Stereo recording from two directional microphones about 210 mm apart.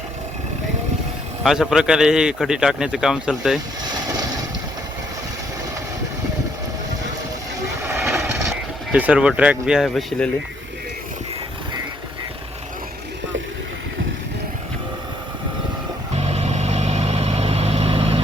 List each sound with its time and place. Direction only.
1.5 s speech: centre (ahead or behind)
4.1 s vehicle: 15° right (ahead or behind)
7.8 s a sound: 10° right (ahead or behind)
8.0 s vehicle: centre (ahead or behind)
16.1 s vehicle: 30° right (ahead or behind)